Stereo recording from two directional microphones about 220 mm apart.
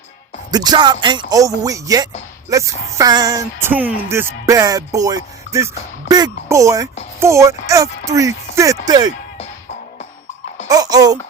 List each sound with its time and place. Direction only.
0.5 s music: 20° right (ahead or behind)
10.7 s music: 15° right (ahead or behind)